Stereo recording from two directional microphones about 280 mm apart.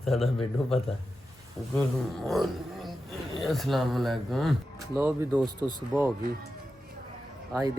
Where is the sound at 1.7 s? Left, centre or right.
Centre.